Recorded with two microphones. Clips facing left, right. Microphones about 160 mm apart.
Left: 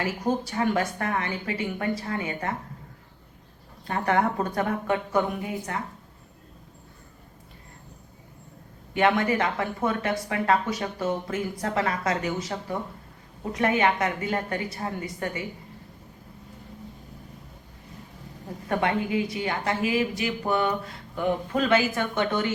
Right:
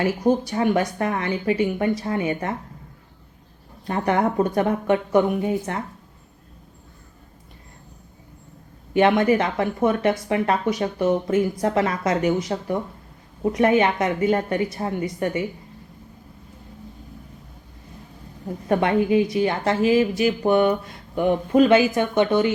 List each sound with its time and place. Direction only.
0.0 s speech: 20° right (ahead or behind)
3.8 s speech: 20° right (ahead or behind)
8.9 s speech: 20° right (ahead or behind)
18.7 s speech: 20° right (ahead or behind)